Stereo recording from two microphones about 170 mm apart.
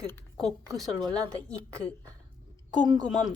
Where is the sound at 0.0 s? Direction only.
15° left (ahead or behind).